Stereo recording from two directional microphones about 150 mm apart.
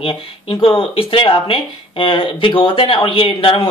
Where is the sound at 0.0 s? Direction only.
35° left (ahead or behind).